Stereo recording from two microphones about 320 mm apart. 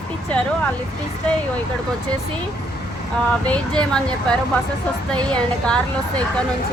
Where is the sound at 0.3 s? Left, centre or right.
Centre.